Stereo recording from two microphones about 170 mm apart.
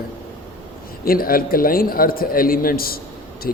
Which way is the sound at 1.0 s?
60° left (ahead or behind).